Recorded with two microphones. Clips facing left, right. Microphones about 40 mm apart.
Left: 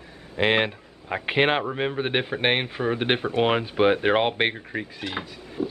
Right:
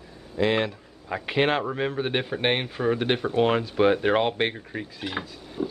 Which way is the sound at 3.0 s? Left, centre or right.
Left.